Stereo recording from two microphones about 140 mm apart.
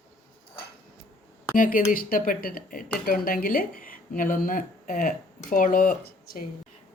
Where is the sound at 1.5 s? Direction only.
80° left.